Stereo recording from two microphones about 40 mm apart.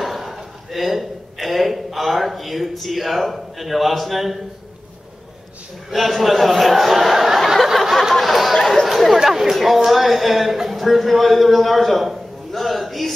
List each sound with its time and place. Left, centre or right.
0.0 s a sound: centre
5.9 s speech: centre
7.5 s a sound: centre
8.5 s chatter: centre
8.8 s chatter: centre
9.2 s speech: centre